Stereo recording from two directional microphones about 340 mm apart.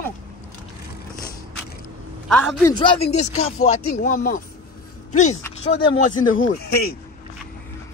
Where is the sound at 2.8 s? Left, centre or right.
Centre.